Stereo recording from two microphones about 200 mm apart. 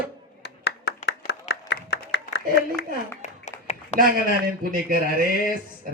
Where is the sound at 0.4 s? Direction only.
60° left (ahead or behind).